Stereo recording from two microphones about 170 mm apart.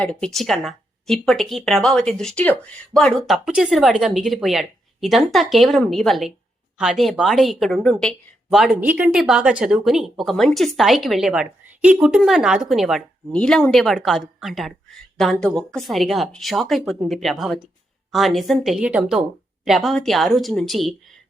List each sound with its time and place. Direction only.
0.0 s a woman's voice: 5° left (ahead or behind)